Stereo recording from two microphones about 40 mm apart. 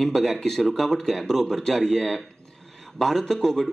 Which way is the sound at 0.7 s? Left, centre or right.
Centre.